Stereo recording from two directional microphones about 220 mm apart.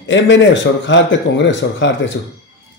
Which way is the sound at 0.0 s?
55° left (ahead or behind).